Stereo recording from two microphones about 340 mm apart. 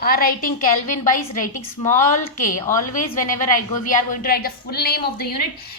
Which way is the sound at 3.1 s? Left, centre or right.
Left.